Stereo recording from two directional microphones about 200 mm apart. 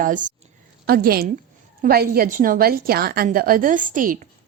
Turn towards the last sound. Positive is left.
turn(degrees=-40)  # may be behind; listen again after turning